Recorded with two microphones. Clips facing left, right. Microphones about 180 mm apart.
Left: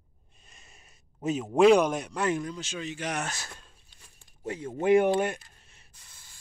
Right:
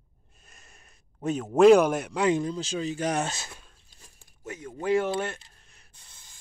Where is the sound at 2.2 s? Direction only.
25° right (ahead or behind).